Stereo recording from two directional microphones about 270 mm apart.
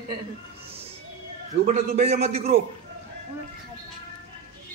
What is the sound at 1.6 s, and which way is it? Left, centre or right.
Speech, right.